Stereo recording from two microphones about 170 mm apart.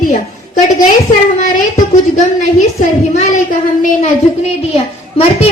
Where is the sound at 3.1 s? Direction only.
45° left (ahead or behind).